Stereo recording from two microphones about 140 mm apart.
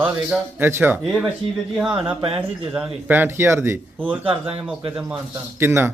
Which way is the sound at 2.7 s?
10° right (ahead or behind).